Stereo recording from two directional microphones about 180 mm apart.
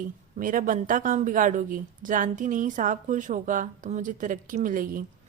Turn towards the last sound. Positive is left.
turn(degrees=-50)  # may be behind; listen again after turning